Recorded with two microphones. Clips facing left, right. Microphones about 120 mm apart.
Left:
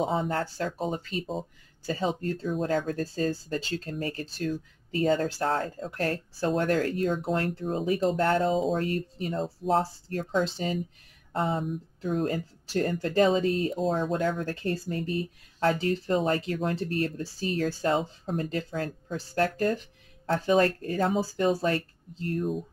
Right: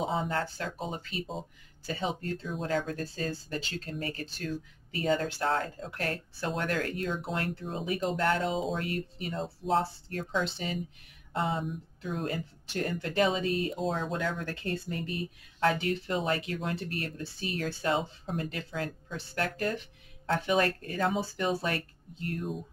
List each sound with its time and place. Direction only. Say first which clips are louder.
0.2 s speech: left 3 dB; 40° left (ahead or behind)